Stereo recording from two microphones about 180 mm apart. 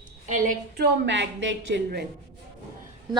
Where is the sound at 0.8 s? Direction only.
80° right.